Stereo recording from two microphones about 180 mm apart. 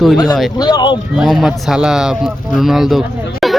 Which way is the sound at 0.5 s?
25° left (ahead or behind).